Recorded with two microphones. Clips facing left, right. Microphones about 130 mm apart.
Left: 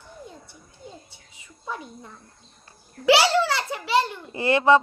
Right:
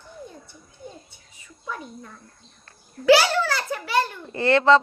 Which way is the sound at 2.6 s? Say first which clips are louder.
Right 2 dB; 20° left (ahead or behind).